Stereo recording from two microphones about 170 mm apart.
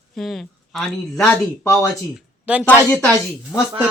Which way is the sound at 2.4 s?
5° right (ahead or behind).